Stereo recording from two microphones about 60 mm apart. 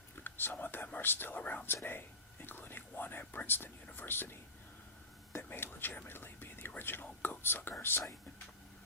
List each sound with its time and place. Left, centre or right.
0.2 s speech: left
6.1 s whispering: left
6.7 s speech: left